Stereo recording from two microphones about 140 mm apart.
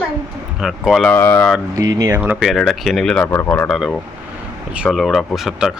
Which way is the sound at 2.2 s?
5° right (ahead or behind).